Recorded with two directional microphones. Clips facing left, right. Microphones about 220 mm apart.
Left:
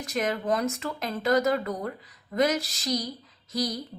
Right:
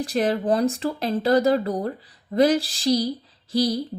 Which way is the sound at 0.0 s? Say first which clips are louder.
Right 6 dB; 30° right (ahead or behind).